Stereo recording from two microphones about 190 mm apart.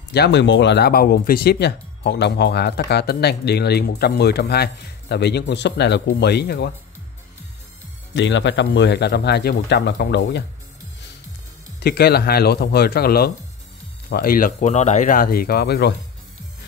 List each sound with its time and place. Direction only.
0.1 s speech: 65° left (ahead or behind)
8.1 s speech: 75° left (ahead or behind)
11.8 s speech: 55° left (ahead or behind)